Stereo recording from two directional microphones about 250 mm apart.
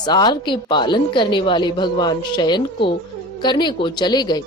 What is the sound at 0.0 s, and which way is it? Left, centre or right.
A woman's voice, centre.